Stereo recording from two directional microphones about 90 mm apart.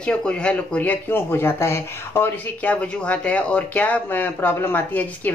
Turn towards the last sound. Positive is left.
turn(degrees=20)  # may be behind; listen again after turning